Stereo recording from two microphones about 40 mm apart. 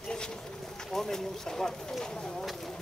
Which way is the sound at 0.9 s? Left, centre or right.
Centre.